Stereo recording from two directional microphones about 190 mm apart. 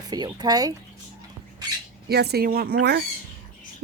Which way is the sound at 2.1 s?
55° right (ahead or behind).